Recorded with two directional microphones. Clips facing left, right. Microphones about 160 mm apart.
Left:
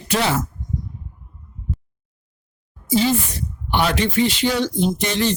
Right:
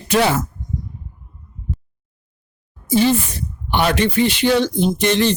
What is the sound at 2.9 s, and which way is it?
Speech, 60° right (ahead or behind).